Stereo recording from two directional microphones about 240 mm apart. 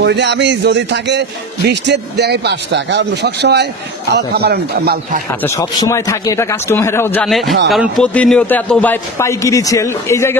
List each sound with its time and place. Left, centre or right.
0.0 s a man's voice: right
5.4 s a man's voice: centre